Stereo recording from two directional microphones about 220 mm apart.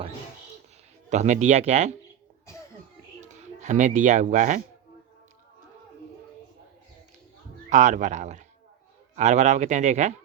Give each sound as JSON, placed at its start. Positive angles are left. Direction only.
{"t": 1.1, "sound": "speech", "side_deg": -30}
{"t": 3.6, "sound": "speech", "side_deg": -35}
{"t": 7.7, "sound": "speech", "side_deg": -35}